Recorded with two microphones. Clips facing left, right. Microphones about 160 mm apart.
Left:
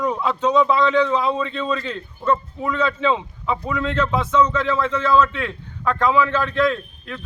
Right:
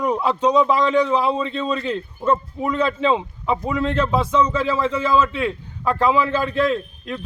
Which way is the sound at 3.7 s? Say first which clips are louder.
Right 1 dB; 35° right (ahead or behind).